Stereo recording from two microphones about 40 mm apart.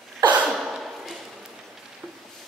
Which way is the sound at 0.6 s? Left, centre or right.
Centre.